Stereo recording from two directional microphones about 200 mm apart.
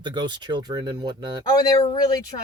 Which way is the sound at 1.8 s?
20° left (ahead or behind).